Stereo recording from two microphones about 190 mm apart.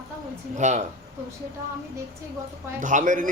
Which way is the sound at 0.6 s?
40° right (ahead or behind).